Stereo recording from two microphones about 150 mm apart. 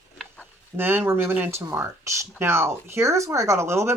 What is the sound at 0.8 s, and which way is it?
Speech, 15° right (ahead or behind).